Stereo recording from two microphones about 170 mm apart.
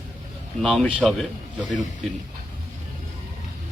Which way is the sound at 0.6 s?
Centre (ahead or behind).